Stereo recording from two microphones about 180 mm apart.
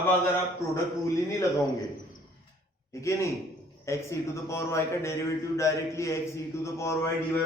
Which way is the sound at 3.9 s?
15° left (ahead or behind).